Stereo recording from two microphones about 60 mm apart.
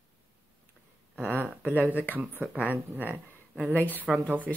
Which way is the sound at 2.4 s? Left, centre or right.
Right.